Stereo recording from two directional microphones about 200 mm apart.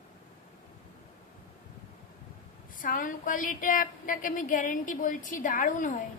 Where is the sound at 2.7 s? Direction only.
40° left (ahead or behind).